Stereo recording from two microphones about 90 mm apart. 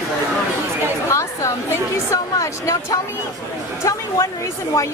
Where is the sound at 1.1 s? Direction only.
35° left (ahead or behind).